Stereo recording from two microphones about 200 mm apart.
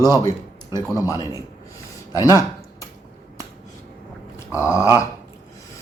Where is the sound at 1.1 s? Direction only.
15° left (ahead or behind).